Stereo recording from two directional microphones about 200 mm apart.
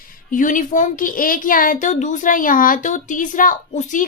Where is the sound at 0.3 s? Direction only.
40° left (ahead or behind).